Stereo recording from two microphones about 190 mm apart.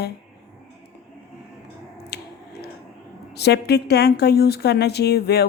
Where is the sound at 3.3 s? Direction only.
60° left (ahead or behind).